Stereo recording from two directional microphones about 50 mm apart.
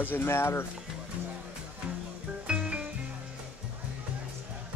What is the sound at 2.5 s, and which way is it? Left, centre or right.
Music, right.